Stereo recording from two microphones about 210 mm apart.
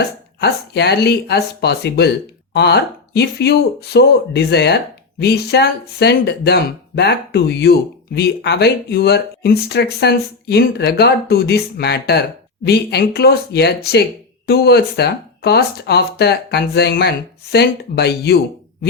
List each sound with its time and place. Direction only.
0.3 s speech: 50° left (ahead or behind)